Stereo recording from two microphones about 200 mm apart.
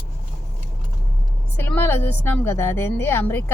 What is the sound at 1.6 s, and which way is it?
Speech, 10° left (ahead or behind).